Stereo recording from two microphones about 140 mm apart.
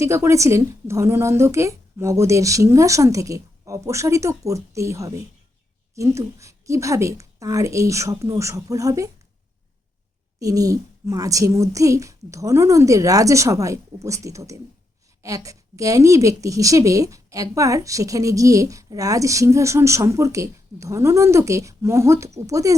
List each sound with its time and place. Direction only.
0.0 s a woman's voice: 20° right (ahead or behind)
10.4 s a woman's voice: 25° right (ahead or behind)